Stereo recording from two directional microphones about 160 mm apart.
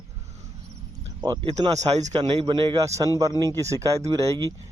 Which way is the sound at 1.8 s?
45° right (ahead or behind).